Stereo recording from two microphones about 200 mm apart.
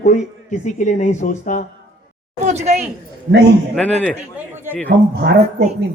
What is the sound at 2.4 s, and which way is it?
Speech, 35° right (ahead or behind).